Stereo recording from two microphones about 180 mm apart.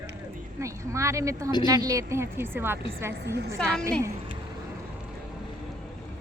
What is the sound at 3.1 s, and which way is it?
Speech, 65° right (ahead or behind).